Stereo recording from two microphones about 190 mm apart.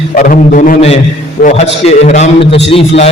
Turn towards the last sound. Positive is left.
turn(degrees=30)  # may be behind; listen again after turning